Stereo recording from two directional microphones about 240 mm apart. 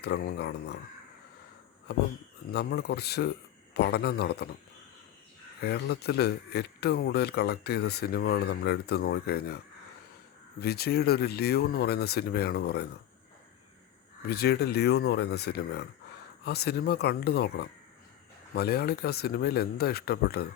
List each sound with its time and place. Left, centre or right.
0.0 s speech: left
1.9 s speech: left
5.6 s speech: left
10.6 s speech: left
14.2 s speech: left